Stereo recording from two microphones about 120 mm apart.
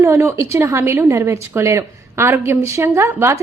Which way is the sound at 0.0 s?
20° right (ahead or behind).